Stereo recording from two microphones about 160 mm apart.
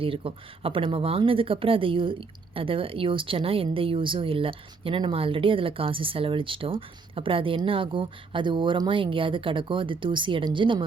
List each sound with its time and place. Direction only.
0.0 s speech: 35° right (ahead or behind)